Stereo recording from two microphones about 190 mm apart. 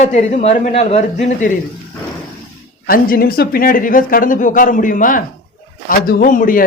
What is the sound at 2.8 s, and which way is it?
Speech, 50° left (ahead or behind).